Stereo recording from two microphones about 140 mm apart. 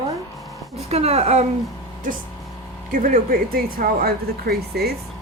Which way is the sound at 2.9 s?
75° right (ahead or behind).